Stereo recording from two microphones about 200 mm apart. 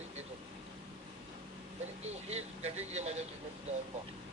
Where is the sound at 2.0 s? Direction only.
35° right (ahead or behind).